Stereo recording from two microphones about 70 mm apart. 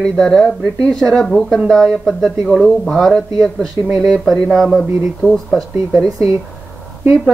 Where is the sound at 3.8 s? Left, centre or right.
Centre.